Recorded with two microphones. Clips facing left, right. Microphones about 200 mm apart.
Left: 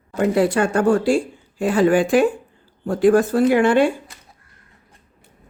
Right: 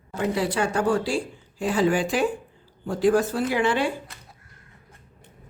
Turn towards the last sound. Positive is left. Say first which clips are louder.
# left 8 dB
turn(degrees=50)  # may be behind; listen again after turning